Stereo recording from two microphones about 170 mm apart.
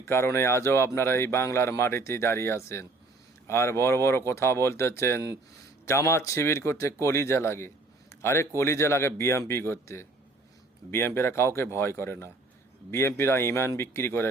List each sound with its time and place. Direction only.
0.0 s speech: 15° left (ahead or behind)